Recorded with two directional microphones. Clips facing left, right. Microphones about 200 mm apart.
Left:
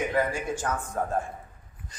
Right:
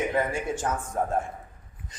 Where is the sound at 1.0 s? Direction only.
20° right (ahead or behind).